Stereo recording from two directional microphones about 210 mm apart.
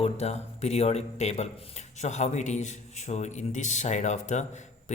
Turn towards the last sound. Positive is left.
turn(degrees=35)  # may be behind; listen again after turning